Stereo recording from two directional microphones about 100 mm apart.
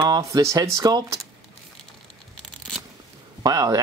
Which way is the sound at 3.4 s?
40° right (ahead or behind).